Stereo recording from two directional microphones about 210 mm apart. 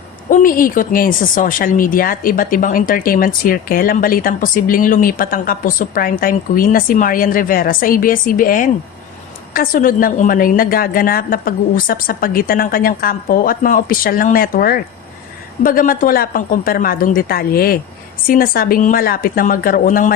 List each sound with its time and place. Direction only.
0.3 s a woman's voice: 40° left (ahead or behind)